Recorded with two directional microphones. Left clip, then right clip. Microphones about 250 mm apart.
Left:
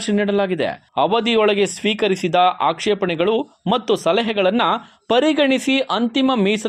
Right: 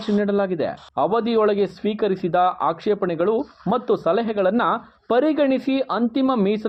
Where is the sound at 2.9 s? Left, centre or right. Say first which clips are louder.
Left 2 dB; centre.